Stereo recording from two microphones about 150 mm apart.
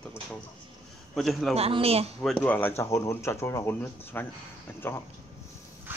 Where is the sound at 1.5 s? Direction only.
40° right (ahead or behind).